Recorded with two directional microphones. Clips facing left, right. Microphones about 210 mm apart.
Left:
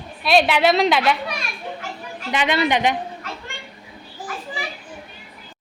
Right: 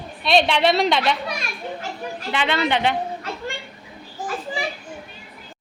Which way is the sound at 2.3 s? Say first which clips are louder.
Left 2 dB; 15° left (ahead or behind).